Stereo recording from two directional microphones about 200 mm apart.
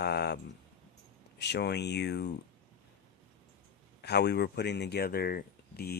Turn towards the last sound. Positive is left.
turn(degrees=50)  # may be behind; listen again after turning